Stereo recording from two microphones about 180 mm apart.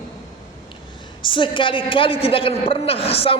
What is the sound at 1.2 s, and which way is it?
A man's voice, 30° left (ahead or behind).